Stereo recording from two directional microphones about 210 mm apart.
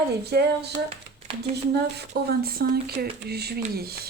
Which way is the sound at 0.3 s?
50° right (ahead or behind).